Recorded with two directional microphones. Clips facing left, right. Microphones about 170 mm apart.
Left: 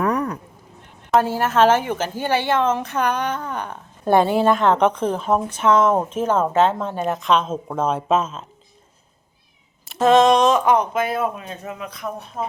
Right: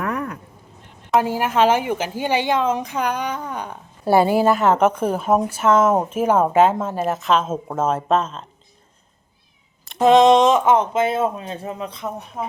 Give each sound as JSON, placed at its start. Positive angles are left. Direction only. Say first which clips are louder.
{"t": 0.0, "sound": "a sound", "louder": "left 4 dB", "side_deg": 35}
{"t": 1.2, "sound": "a woman's voice", "louder": "left 1 dB", "side_deg": -15}
{"t": 10.0, "sound": "speech", "louder": "right 2 dB", "side_deg": -20}